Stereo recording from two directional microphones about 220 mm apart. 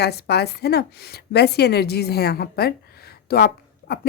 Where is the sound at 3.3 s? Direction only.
45° left (ahead or behind).